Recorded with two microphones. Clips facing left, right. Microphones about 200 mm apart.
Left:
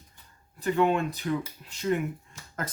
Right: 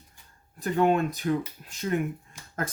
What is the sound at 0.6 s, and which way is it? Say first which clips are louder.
Speech: right 1 dB; 45° right (ahead or behind).